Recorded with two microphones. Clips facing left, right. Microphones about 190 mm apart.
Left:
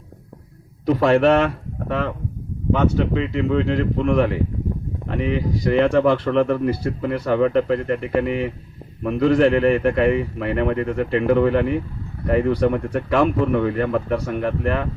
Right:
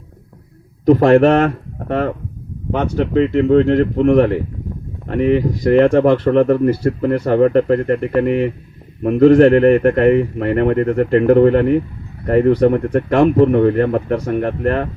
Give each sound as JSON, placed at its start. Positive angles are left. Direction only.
{"t": 0.9, "sound": "speech", "side_deg": -50}